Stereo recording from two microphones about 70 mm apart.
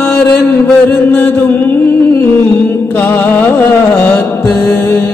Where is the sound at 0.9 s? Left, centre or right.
Left.